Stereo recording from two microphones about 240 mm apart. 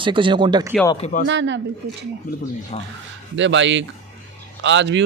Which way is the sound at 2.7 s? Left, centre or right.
Left.